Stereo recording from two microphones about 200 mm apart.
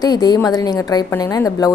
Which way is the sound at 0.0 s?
20° left (ahead or behind).